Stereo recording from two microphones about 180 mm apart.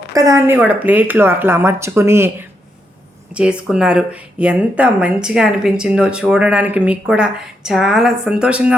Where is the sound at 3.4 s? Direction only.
5° right (ahead or behind).